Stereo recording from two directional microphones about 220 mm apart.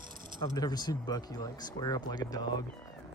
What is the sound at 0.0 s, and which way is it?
Coin, 40° right (ahead or behind).